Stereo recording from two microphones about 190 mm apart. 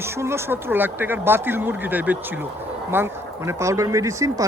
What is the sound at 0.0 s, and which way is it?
Speech, 15° right (ahead or behind).